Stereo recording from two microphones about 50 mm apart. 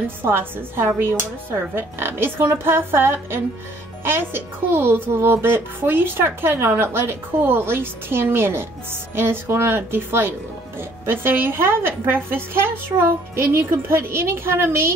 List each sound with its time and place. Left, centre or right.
0.2 s a woman's voice: right